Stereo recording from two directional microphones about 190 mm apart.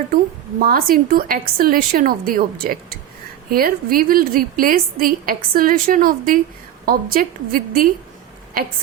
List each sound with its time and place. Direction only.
0.6 s a woman's voice: 50° right (ahead or behind)